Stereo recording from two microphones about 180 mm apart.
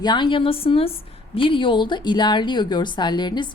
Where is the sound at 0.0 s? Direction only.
25° left (ahead or behind).